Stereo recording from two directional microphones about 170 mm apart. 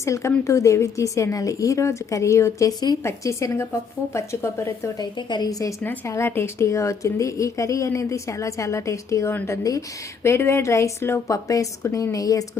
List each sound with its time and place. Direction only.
0.0 s a woman's voice: 15° left (ahead or behind)